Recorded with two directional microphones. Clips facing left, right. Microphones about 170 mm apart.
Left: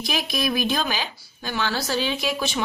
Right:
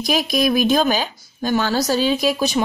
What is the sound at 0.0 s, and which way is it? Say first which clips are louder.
Speech: right 7 dB; 40° right (ahead or behind).